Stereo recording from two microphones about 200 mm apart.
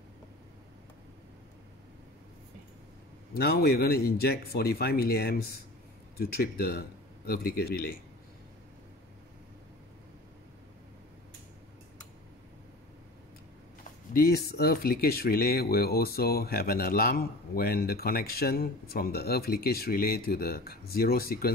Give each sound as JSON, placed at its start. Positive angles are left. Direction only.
{"t": 3.3, "sound": "speech", "side_deg": 50}
{"t": 14.1, "sound": "speech", "side_deg": 50}